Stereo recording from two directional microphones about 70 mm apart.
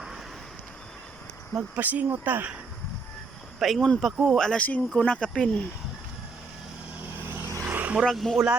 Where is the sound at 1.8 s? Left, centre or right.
Right.